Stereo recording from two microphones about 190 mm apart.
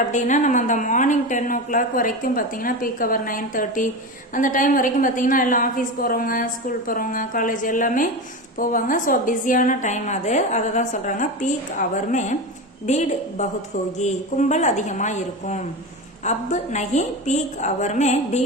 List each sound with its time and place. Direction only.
0.1 s a woman's voice: 40° left (ahead or behind)